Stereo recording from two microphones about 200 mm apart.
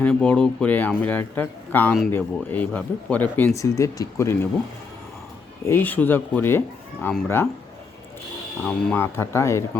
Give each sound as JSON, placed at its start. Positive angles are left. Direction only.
{"t": 0.0, "sound": "a man's voice", "side_deg": 5}
{"t": 5.6, "sound": "a man's voice", "side_deg": 10}
{"t": 8.6, "sound": "a man's voice", "side_deg": 10}